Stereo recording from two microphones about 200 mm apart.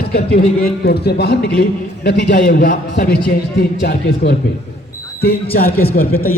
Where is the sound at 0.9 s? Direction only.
55° left (ahead or behind).